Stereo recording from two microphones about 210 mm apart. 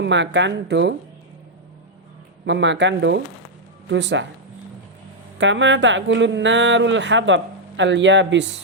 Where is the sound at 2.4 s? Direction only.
60° right (ahead or behind).